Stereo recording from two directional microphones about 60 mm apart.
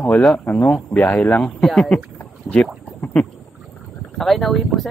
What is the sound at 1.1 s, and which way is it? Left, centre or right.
Speech, left.